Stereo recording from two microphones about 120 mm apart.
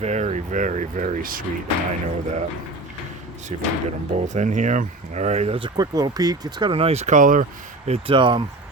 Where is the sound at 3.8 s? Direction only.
85° right; by 5.6 s 70° right (ahead or behind).